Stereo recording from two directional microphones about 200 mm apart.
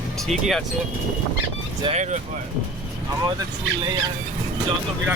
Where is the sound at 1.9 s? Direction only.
35° right (ahead or behind).